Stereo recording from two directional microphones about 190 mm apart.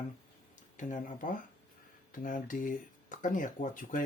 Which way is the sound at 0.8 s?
40° left (ahead or behind).